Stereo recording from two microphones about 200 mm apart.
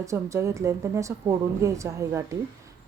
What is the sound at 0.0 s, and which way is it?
A woman's voice, 15° right (ahead or behind).